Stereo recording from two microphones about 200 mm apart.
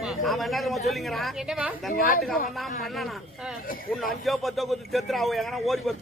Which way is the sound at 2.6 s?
Centre (ahead or behind).